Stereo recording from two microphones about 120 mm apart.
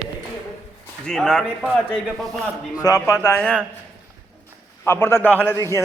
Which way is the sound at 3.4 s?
5° left (ahead or behind).